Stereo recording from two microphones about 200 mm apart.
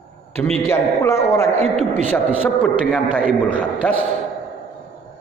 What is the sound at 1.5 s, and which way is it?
Speech, 35° right (ahead or behind).